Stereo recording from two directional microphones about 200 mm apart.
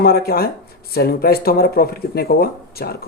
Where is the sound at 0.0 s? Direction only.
50° left (ahead or behind).